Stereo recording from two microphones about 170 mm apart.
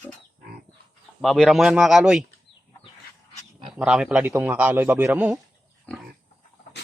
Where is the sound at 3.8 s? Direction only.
5° right (ahead or behind).